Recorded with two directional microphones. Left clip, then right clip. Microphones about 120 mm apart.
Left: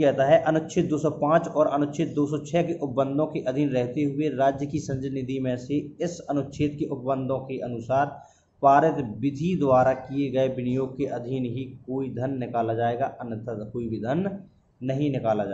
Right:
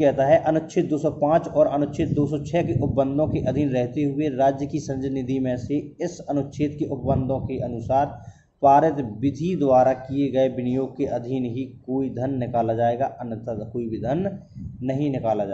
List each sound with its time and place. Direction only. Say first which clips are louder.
0.0 s a man's voice: right 2 dB; 25° right (ahead or behind)